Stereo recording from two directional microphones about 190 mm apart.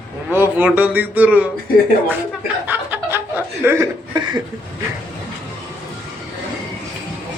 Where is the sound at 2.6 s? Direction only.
10° right (ahead or behind).